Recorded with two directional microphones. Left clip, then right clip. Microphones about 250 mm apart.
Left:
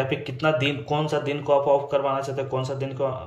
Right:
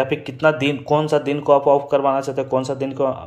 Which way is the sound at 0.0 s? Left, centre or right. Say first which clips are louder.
Right 6 dB; centre.